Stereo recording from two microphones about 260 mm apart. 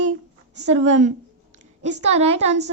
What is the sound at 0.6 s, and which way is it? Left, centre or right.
A woman's voice, right.